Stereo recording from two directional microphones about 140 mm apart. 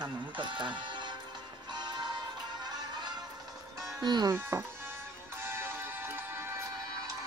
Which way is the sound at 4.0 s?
30° right (ahead or behind).